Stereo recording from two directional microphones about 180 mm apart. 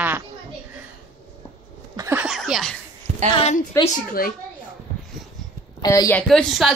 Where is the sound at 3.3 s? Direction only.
35° left (ahead or behind).